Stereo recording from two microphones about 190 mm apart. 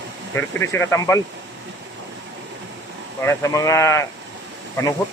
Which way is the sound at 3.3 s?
15° left (ahead or behind).